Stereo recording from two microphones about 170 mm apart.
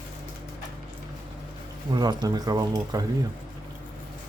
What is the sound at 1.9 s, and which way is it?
Speech, 25° right (ahead or behind).